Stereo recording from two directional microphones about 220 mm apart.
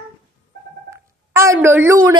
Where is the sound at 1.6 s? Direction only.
10° right (ahead or behind).